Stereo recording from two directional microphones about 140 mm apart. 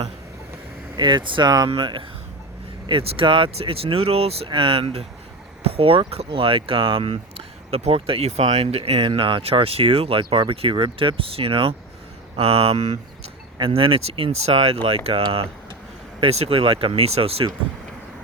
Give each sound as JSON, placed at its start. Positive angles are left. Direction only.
{"t": 0.9, "sound": "speech", "side_deg": -35}
{"t": 13.6, "sound": "speech", "side_deg": -40}